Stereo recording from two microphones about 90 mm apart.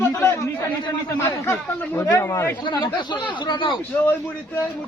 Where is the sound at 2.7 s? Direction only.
55° left (ahead or behind).